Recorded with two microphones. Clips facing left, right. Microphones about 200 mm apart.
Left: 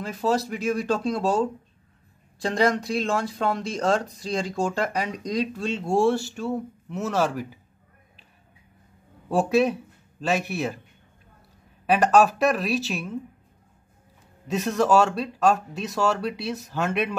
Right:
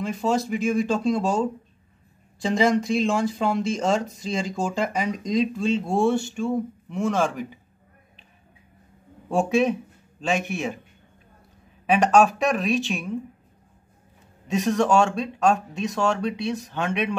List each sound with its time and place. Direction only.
0.0 s speech: centre (ahead or behind)
9.3 s speech: centre (ahead or behind)
11.8 s speech: centre (ahead or behind)
14.5 s speech: centre (ahead or behind)